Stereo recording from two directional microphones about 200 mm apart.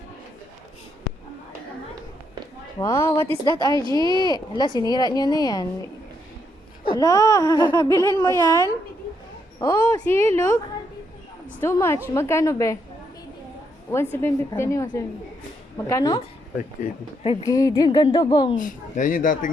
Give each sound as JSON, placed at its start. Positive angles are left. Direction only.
{"t": 2.7, "sound": "speech", "side_deg": 15}
{"t": 3.8, "sound": "speech", "side_deg": -20}
{"t": 4.1, "sound": "speech", "side_deg": 20}
{"t": 6.9, "sound": "speech", "side_deg": 15}
{"t": 11.6, "sound": "speech", "side_deg": 10}
{"t": 14.2, "sound": "speech", "side_deg": 10}
{"t": 17.2, "sound": "speech", "side_deg": 15}
{"t": 18.5, "sound": "speech", "side_deg": 40}